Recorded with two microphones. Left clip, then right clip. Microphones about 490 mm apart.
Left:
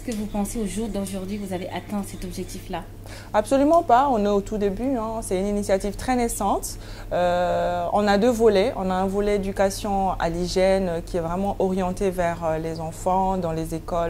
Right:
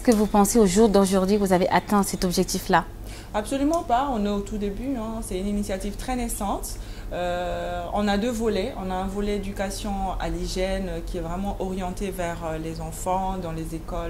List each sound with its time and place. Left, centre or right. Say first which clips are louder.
0.0 s a woman's voice: right 10 dB; right
3.3 s speech: left 7 dB; left